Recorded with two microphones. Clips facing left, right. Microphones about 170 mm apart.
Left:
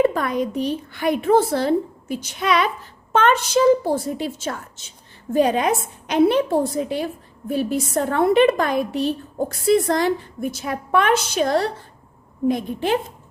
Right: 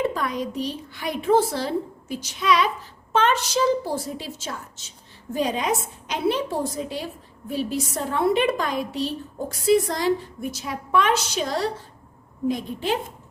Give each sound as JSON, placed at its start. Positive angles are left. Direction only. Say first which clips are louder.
{"t": 0.0, "sound": "a woman's voice", "louder": "left 6 dB", "side_deg": 55}